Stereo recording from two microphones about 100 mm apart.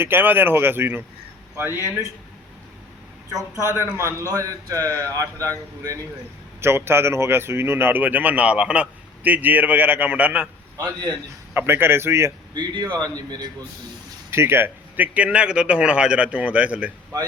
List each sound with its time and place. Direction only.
0.0 s speech: 20° right (ahead or behind)
3.6 s speech: 25° right (ahead or behind)
6.6 s speech: 25° right (ahead or behind)
11.5 s speech: 25° right (ahead or behind)
12.5 s speech: 45° right (ahead or behind)
14.3 s speech: 25° right (ahead or behind)